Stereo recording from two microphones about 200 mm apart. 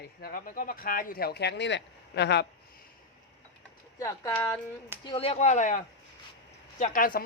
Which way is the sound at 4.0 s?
15° left (ahead or behind).